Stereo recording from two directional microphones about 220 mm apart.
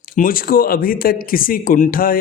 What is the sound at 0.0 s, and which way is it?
Speech, 40° left (ahead or behind).